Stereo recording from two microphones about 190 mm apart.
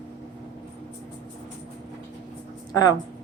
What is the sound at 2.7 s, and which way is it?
Speech, 20° left (ahead or behind).